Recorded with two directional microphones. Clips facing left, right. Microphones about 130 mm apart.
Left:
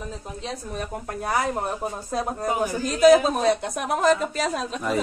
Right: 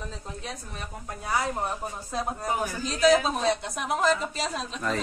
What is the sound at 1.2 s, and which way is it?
Speech, 60° left (ahead or behind).